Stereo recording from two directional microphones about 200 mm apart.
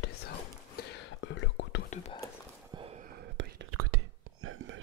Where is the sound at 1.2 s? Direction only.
60° left (ahead or behind).